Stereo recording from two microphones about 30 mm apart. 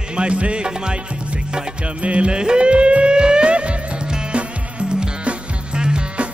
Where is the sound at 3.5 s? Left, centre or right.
Right.